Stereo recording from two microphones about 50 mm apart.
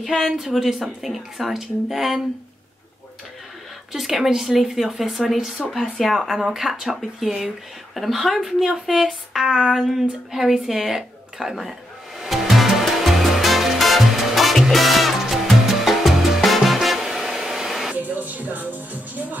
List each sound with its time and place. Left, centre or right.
0.0 s speech: centre
3.9 s speech: centre
12.2 s music: centre
17.9 s speech: right